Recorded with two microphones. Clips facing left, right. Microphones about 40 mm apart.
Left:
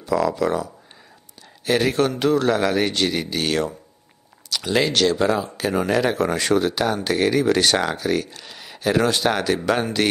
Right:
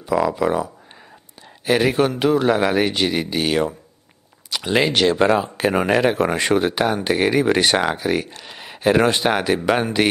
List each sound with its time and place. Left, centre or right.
0.0 s speech: centre
1.7 s speech: centre
5.2 s speech: right; by 10.0 s centre